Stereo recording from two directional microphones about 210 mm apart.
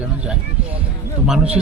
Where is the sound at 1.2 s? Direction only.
5° right (ahead or behind).